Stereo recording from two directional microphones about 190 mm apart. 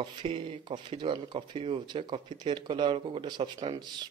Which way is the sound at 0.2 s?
25° right (ahead or behind).